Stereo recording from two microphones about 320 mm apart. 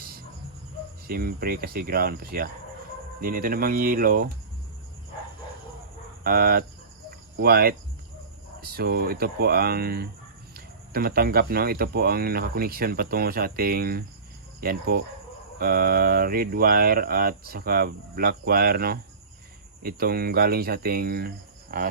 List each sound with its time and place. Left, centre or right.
1.0 s speech: right
6.2 s speech: right